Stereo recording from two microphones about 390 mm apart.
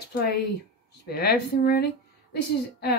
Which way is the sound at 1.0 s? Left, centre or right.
Left.